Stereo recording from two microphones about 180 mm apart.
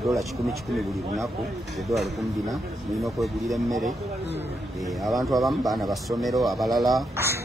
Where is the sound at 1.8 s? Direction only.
Centre (ahead or behind).